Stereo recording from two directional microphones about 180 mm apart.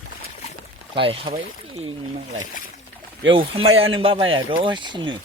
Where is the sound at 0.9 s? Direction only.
30° right (ahead or behind).